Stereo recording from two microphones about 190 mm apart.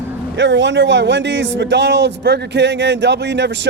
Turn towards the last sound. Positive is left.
turn(degrees=-65)  # may be behind; listen again after turning